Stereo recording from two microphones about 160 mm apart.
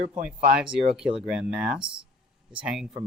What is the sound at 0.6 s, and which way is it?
Speech, 5° right (ahead or behind).